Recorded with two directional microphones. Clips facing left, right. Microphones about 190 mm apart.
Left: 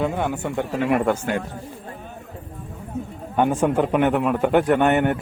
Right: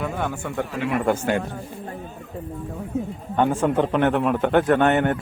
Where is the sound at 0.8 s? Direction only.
50° left (ahead or behind).